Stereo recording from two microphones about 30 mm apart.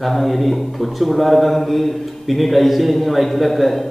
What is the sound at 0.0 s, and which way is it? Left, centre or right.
A woman's voice, centre.